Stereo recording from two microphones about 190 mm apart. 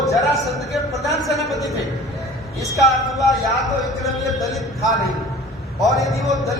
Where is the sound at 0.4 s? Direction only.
Centre (ahead or behind).